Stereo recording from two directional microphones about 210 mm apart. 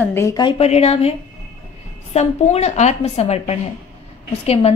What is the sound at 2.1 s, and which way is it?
A woman's voice, 30° left (ahead or behind).